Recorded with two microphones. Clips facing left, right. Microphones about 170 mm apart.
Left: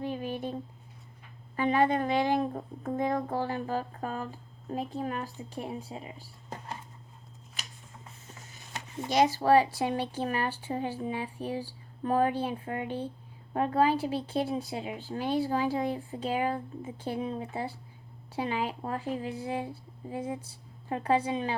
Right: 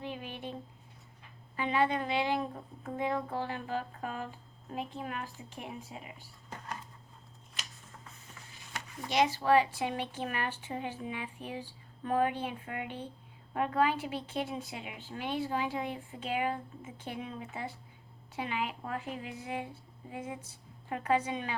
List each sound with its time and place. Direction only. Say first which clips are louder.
0.0 s speech: left 7 dB; 40° left (ahead or behind)
1.5 s a woman's voice: left 5 dB; 45° left (ahead or behind)
9.0 s a woman's voice: left 4 dB; 40° left (ahead or behind)